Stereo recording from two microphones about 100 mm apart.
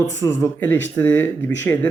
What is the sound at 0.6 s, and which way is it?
Speech, 20° left (ahead or behind).